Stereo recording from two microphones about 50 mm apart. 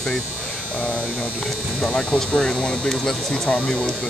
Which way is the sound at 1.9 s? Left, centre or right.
Left.